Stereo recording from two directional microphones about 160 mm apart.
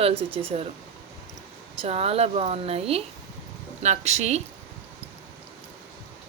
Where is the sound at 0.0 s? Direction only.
35° right (ahead or behind).